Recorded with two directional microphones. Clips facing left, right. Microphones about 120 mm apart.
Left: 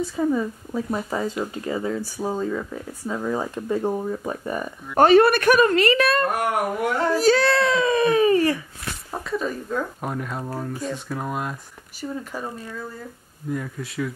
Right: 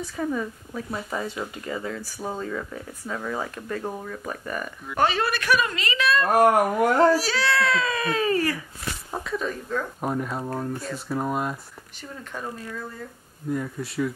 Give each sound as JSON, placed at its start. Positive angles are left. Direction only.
{"t": 0.0, "sound": "speech", "side_deg": 20}
{"t": 4.9, "sound": "a woman's voice", "side_deg": 50}
{"t": 6.3, "sound": "speech", "side_deg": -40}
{"t": 7.2, "sound": "a woman's voice", "side_deg": 50}
{"t": 7.5, "sound": "speech", "side_deg": 20}
{"t": 9.1, "sound": "speech", "side_deg": 0}